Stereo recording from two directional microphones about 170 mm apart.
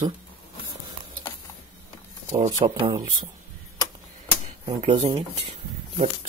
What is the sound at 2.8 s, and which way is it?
Speech, 25° right (ahead or behind).